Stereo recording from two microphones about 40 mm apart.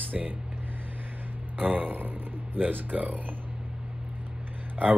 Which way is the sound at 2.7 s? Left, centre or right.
Right.